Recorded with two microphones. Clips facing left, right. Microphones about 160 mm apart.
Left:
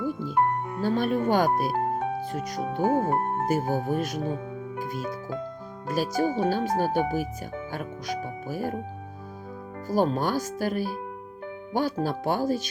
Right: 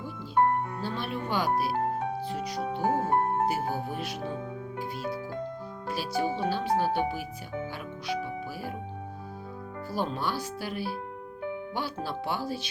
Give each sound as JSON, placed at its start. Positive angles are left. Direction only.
{"t": 0.0, "sound": "music", "side_deg": 45}
{"t": 0.8, "sound": "speech", "side_deg": 45}
{"t": 7.7, "sound": "music", "side_deg": 45}
{"t": 9.9, "sound": "speech", "side_deg": 45}